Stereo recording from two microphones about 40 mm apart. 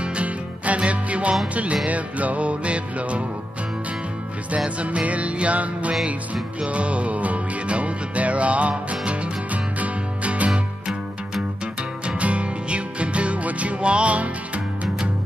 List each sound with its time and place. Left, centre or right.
0.0 s music: right
4.6 s music: right
10.5 s music: centre
12.2 s music: right